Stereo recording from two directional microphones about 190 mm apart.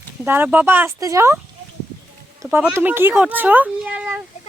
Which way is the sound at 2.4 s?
10° right (ahead or behind).